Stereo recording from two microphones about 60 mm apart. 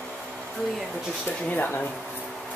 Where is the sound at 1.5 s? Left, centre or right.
Left.